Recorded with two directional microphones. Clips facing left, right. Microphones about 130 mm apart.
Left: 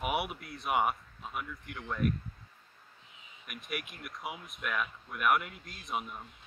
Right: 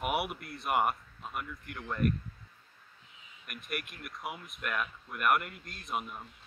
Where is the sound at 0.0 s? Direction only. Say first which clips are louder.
Right 1 dB; centre (ahead or behind).